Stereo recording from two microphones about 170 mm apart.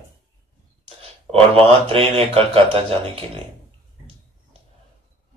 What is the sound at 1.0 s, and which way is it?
A man's voice, 35° right (ahead or behind).